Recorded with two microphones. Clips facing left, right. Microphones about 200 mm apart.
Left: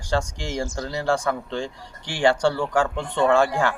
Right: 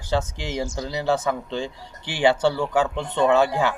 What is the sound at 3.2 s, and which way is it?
Speech, 5° right (ahead or behind).